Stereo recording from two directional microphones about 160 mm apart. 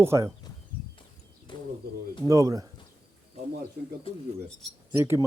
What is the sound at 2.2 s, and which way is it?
Speech, 20° right (ahead or behind).